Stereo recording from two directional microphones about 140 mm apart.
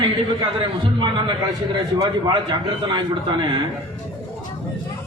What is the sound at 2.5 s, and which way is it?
A man's voice, 35° right (ahead or behind).